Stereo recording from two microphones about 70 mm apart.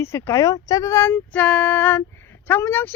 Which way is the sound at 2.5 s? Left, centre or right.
Left.